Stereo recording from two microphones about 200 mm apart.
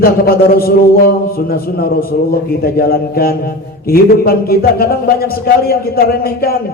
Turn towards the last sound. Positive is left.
turn(degrees=50)  # may be behind; listen again after turning